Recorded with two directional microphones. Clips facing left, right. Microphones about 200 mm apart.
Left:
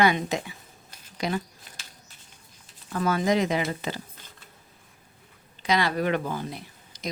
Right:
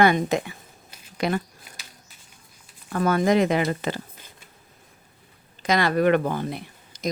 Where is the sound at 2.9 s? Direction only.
55° right (ahead or behind).